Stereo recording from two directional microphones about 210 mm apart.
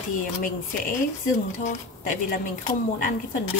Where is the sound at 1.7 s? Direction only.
40° left (ahead or behind).